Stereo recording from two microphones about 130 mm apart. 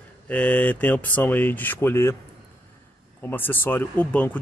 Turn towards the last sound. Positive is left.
turn(degrees=10)  # may be behind; listen again after turning